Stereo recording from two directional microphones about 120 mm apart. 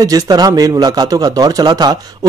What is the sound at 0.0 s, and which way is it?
A man's voice, 30° right (ahead or behind).